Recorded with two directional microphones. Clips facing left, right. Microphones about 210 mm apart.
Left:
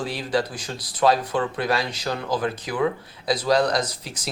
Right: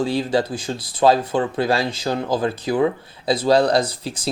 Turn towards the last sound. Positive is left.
turn(degrees=-30)  # may be behind; listen again after turning